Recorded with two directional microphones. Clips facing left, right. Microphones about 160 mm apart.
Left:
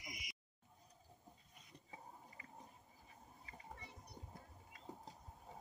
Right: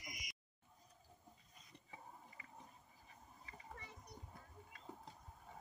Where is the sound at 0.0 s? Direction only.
Centre (ahead or behind).